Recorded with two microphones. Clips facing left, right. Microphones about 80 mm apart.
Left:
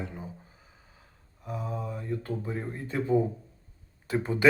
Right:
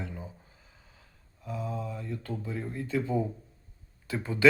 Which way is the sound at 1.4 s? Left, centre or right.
Centre.